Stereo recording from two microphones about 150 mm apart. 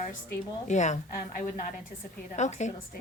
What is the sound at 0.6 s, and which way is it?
Speech, 50° left (ahead or behind).